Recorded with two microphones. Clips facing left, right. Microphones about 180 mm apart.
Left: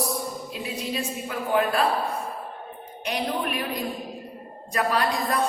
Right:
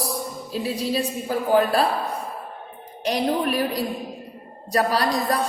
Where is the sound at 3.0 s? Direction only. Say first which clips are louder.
Right 5 dB; 35° right (ahead or behind).